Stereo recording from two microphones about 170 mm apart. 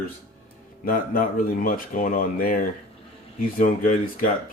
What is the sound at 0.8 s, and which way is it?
Speech, 60° left (ahead or behind).